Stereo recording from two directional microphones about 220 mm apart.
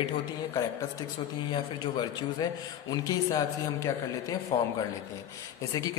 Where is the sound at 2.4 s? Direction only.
15° left (ahead or behind).